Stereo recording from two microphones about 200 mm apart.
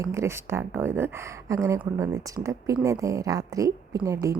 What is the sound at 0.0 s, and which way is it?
Speech, 15° right (ahead or behind).